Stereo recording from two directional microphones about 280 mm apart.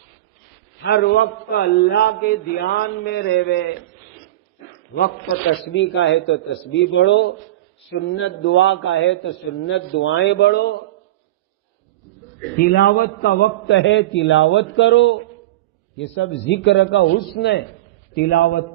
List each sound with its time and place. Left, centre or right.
0.8 s a man's voice: left
4.9 s a man's voice: left
12.5 s a man's voice: left
16.1 s speech: left
17.2 s a man's voice: left